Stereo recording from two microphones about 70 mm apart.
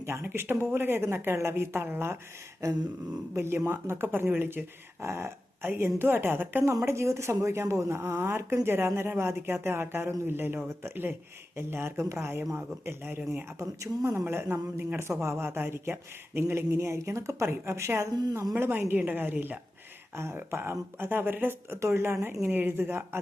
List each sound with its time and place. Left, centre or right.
0.0 s speech: right
3.3 s speech: right
6.8 s speech: right
18.5 s speech: right
20.1 s speech: right